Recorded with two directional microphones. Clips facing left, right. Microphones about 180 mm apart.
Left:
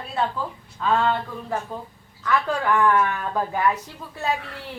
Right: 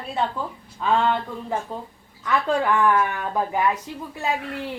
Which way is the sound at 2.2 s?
15° right (ahead or behind).